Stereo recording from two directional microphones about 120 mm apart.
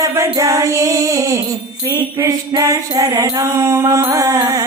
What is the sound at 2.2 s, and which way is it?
Mantra, 30° right (ahead or behind).